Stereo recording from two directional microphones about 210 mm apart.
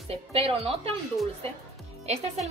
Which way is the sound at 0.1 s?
30° right (ahead or behind).